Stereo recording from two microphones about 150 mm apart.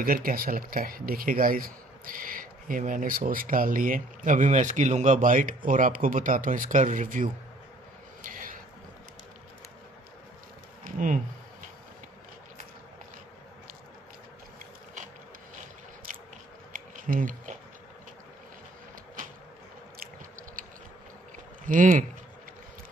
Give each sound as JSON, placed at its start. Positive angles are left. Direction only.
{"t": 0.0, "sound": "speech", "side_deg": -75}
{"t": 8.2, "sound": "a sound", "side_deg": -65}
{"t": 10.8, "sound": "speech", "side_deg": -60}
{"t": 16.7, "sound": "a sound", "side_deg": -65}
{"t": 20.0, "sound": "chewing", "side_deg": -65}
{"t": 21.6, "sound": "speech", "side_deg": -60}